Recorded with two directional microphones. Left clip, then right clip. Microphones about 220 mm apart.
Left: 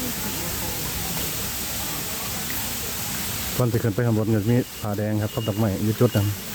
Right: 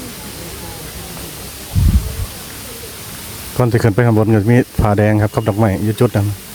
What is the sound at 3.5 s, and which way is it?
Speech, 35° right (ahead or behind).